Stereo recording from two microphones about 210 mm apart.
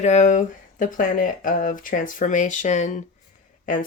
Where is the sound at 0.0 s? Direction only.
35° left (ahead or behind).